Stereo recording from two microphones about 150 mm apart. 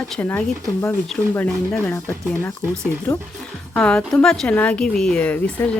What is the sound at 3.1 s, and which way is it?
Speech, 20° left (ahead or behind).